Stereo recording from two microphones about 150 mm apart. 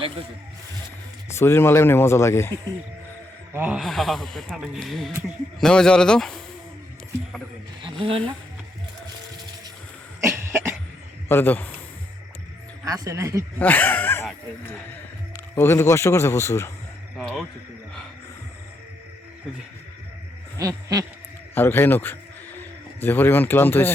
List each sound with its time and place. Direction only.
1.3 s speech: 15° left (ahead or behind)
3.5 s speech: 10° right (ahead or behind)
3.8 s speech: centre (ahead or behind)
7.8 s speech: 35° right (ahead or behind)
10.2 s cough: 15° right (ahead or behind)
11.3 s speech: 15° left (ahead or behind)
12.8 s speech: 20° right (ahead or behind)
13.6 s speech: 10° left (ahead or behind)
15.5 s speech: 15° left (ahead or behind)
17.2 s speech: centre (ahead or behind)
20.6 s owl: 25° right (ahead or behind)
21.5 s a man's voice: 15° left (ahead or behind)